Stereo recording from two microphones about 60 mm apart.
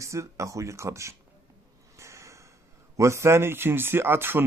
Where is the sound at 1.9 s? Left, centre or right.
Right.